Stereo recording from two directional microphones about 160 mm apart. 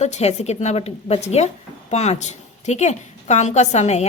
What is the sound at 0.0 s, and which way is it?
A woman's voice, 45° left (ahead or behind).